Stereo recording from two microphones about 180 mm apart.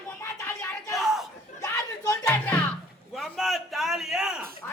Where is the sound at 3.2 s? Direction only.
Centre (ahead or behind).